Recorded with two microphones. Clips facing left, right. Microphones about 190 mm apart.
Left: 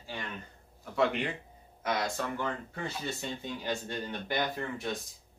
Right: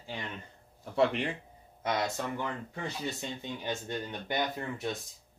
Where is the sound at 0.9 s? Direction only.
30° right (ahead or behind).